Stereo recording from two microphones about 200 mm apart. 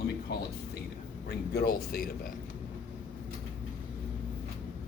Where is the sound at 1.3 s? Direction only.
50° left (ahead or behind).